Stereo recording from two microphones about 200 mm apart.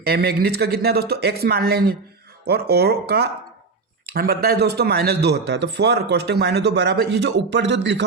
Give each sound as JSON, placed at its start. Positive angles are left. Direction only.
{"t": 0.0, "sound": "speech", "side_deg": -50}